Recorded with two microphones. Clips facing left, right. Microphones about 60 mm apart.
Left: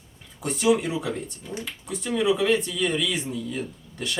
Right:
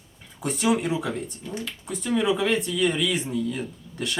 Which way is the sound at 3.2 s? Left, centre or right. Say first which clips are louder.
Right 3 dB; right.